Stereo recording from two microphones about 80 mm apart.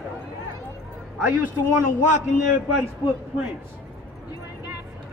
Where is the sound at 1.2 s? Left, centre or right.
Right.